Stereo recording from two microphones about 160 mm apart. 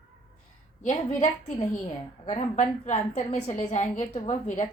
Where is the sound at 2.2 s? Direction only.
45° left (ahead or behind).